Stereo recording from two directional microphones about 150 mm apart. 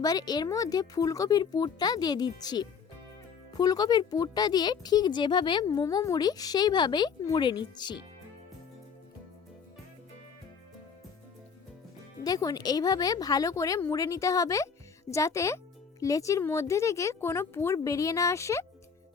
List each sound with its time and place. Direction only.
0.0 s speech: 25° left (ahead or behind)
7.2 s speech: 20° left (ahead or behind)
7.4 s speech: 30° left (ahead or behind)
12.2 s speech: 25° left (ahead or behind)